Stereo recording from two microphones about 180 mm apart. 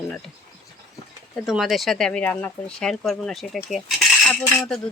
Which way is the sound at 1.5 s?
Centre (ahead or behind).